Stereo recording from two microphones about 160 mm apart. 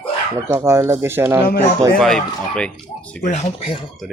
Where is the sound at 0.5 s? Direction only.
20° right (ahead or behind).